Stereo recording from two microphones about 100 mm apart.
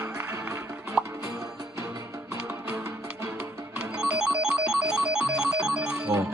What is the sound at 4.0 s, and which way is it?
Music, 10° right (ahead or behind).